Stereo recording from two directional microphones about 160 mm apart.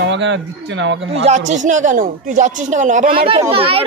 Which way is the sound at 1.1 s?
45° right (ahead or behind).